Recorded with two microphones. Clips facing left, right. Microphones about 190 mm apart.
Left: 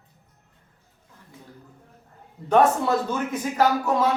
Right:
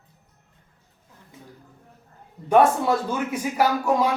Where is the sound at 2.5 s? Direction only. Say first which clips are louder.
Right 1 dB; 10° right (ahead or behind).